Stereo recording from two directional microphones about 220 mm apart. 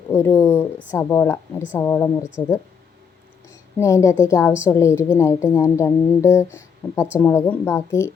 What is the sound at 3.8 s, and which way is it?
Speech, 15° left (ahead or behind).